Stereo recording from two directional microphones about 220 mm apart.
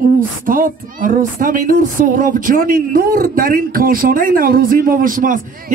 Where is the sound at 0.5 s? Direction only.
40° right (ahead or behind).